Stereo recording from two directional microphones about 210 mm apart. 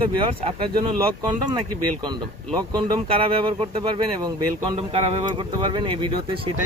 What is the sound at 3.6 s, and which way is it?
Speech, 25° right (ahead or behind).